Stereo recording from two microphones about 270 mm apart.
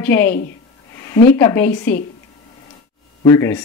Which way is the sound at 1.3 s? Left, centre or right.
Centre.